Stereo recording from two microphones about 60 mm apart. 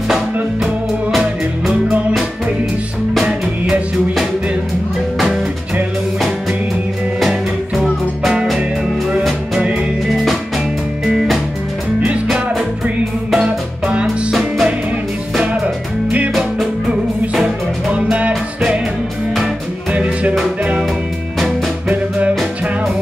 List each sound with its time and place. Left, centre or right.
3.2 s music: centre
7.2 s music: centre
13.4 s music: centre
14.0 s music: centre
15.4 s music: right
16.9 s music: centre
19.9 s music: right